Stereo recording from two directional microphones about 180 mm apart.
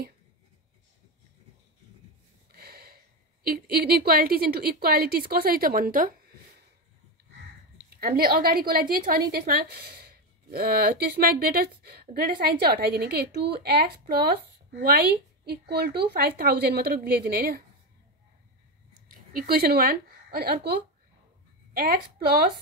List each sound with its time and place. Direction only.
2.5 s a sound: 60° right (ahead or behind)
3.4 s speech: 60° right (ahead or behind)
7.7 s a woman's voice: 55° right (ahead or behind)
19.0 s a woman's voice: 55° right (ahead or behind)